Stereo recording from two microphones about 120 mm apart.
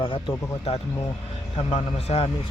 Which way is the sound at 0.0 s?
45° left (ahead or behind).